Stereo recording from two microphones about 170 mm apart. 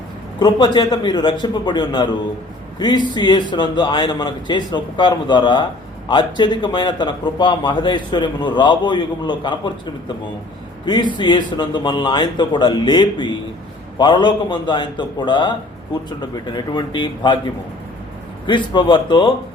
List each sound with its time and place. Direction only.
0.3 s a man's voice: 25° left (ahead or behind)
10.8 s speech: 25° left (ahead or behind)
18.4 s speech: 25° left (ahead or behind)